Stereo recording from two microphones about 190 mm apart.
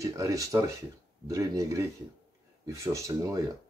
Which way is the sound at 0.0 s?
15° right (ahead or behind).